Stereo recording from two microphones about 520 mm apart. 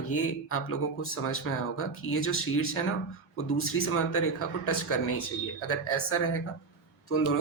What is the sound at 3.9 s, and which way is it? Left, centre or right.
Speech, left.